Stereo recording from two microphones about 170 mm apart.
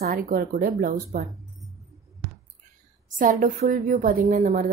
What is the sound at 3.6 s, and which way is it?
A woman's voice, 50° right (ahead or behind).